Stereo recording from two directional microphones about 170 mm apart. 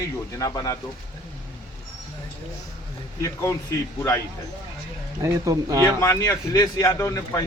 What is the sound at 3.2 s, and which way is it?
Speech, 20° left (ahead or behind).